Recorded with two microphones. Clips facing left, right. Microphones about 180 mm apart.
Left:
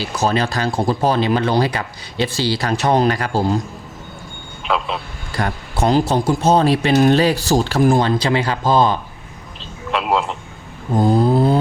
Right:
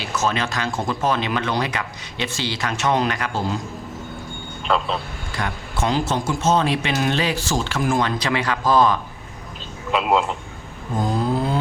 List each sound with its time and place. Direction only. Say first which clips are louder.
0.0 s speech: left 4 dB; 35° left (ahead or behind)
4.7 s a man's voice: left 1 dB; centre (ahead or behind)
5.4 s speech: left 5 dB; 35° left (ahead or behind)
9.9 s a man's voice: even; centre (ahead or behind)
10.9 s a sound: left 7 dB; 35° left (ahead or behind)